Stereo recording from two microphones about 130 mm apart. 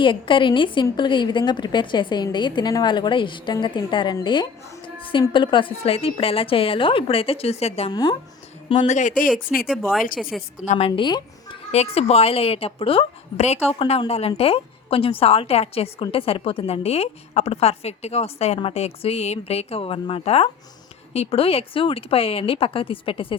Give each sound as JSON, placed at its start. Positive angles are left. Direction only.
{"t": 0.0, "sound": "a woman's voice", "side_deg": 40}
{"t": 8.9, "sound": "speech", "side_deg": 75}
{"t": 10.2, "sound": "a woman's voice", "side_deg": 0}
{"t": 10.8, "sound": "a woman's voice", "side_deg": 45}
{"t": 11.7, "sound": "a woman's voice", "side_deg": 50}